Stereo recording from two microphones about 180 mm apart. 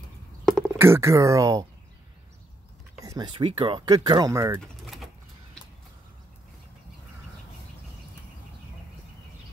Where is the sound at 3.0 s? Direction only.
20° right (ahead or behind).